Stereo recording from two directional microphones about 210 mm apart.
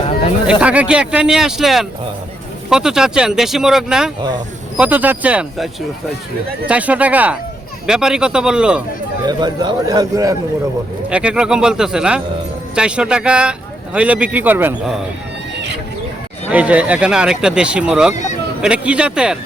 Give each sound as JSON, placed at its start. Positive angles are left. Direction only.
{"t": 0.6, "sound": "a man's voice", "side_deg": -5}
{"t": 9.2, "sound": "a man's voice", "side_deg": -20}
{"t": 11.1, "sound": "a man's voice", "side_deg": -5}
{"t": 16.5, "sound": "a man's voice", "side_deg": -5}
{"t": 18.1, "sound": "speech", "side_deg": 35}
{"t": 18.6, "sound": "a man's voice", "side_deg": -5}